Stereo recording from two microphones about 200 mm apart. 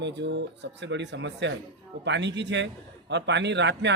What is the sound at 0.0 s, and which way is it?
A man's voice, 60° right (ahead or behind).